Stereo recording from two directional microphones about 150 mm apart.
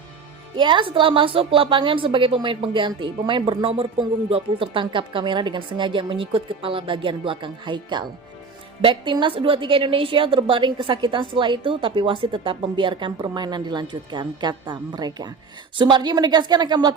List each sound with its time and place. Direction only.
0.5 s a woman's voice: 30° right (ahead or behind)